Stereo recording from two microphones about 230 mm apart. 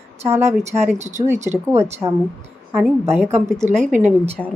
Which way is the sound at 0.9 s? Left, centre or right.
Right.